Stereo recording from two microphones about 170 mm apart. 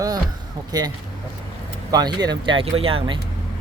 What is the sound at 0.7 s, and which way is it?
Speech, 20° right (ahead or behind).